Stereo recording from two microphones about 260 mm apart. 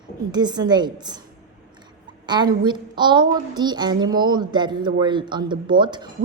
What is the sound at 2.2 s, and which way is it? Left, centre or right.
A woman's voice, centre.